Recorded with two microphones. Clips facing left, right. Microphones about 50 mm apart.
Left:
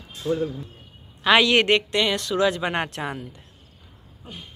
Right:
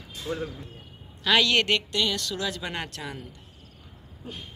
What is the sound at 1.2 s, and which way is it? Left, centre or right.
Speech, left.